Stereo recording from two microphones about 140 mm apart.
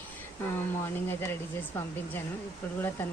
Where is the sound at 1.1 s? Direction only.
15° left (ahead or behind).